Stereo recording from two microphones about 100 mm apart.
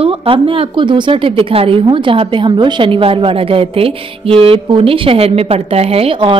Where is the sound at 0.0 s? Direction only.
70° right (ahead or behind).